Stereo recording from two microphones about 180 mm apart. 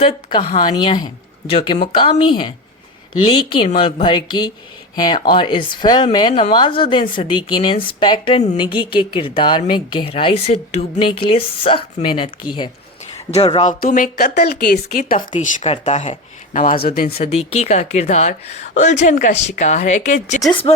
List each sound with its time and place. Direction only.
0.0 s a woman's voice: 30° left (ahead or behind)
3.8 s a woman's voice: 30° left (ahead or behind)
13.8 s speech: 50° left (ahead or behind)
15.4 s a woman's voice: 35° left (ahead or behind); by 17.1 s 55° left (ahead or behind)
17.1 s a woman's voice: 35° left (ahead or behind)
20.5 s a woman's voice: 30° left (ahead or behind)